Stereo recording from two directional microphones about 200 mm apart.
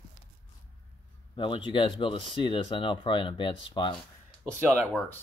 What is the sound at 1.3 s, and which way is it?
Speech, 25° left (ahead or behind).